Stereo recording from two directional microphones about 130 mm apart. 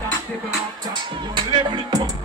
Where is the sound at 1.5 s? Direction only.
35° right (ahead or behind).